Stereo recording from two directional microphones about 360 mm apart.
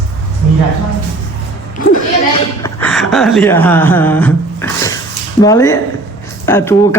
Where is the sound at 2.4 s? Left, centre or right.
Centre.